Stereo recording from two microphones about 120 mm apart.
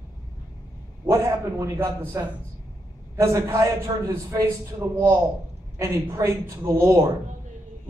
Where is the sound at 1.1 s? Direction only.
25° right (ahead or behind).